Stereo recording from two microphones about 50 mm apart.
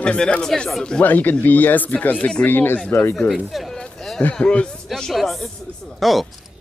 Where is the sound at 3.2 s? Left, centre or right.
Centre.